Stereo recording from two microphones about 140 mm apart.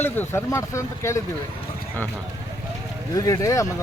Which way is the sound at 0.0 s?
15° left (ahead or behind).